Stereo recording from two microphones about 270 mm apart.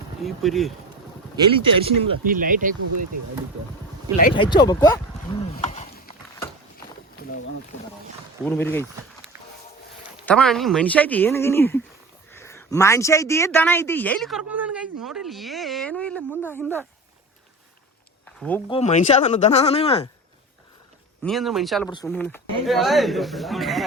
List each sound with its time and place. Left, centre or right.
0.2 s speech: centre
1.4 s speech: centre
2.2 s speech: right
4.4 s speech: centre
8.4 s speech: centre
10.2 s speech: centre
18.3 s a sound: centre
18.7 s speech: left
21.2 s speech: centre
21.8 s speech: centre